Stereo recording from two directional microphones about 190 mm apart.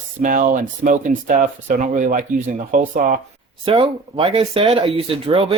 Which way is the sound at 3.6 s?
25° right (ahead or behind).